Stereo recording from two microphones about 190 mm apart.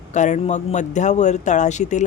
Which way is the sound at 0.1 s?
40° left (ahead or behind).